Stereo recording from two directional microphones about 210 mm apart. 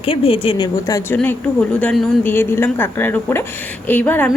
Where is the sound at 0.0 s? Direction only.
25° left (ahead or behind).